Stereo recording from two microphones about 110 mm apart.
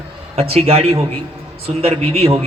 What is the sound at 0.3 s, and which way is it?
A man's voice, 65° right (ahead or behind).